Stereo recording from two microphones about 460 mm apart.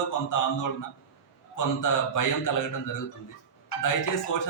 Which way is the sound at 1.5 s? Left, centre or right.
Left.